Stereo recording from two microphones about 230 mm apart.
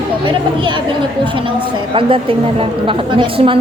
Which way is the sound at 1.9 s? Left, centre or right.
Right.